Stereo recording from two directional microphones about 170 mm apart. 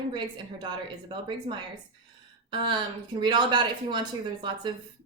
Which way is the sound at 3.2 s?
25° right (ahead or behind).